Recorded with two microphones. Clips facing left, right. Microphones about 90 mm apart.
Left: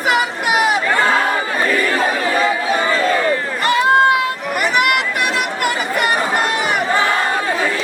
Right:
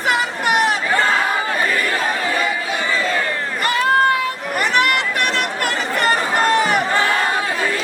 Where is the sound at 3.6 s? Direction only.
20° left (ahead or behind).